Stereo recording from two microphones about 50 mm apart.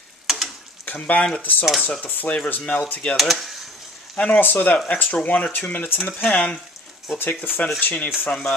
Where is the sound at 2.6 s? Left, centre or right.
Centre.